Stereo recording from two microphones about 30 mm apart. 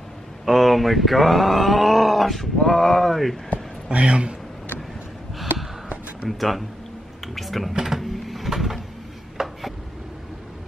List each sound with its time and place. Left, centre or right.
0.5 s speech: centre
2.6 s speech: centre
3.9 s speech: right
6.2 s speech: centre
7.8 s printer: centre
8.5 s a sound: centre
9.4 s a sound: centre